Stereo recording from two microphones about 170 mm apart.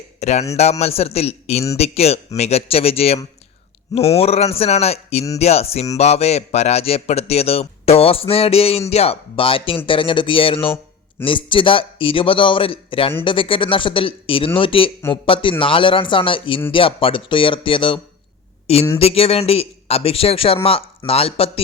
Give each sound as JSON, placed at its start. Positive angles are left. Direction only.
{"t": 0.2, "sound": "a man's voice", "side_deg": 40}